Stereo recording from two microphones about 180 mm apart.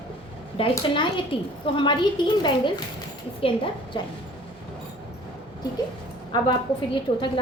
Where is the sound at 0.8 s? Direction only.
30° left (ahead or behind).